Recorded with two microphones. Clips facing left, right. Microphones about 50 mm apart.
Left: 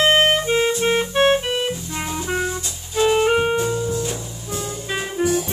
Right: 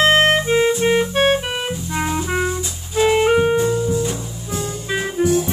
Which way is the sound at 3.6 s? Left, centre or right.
Centre.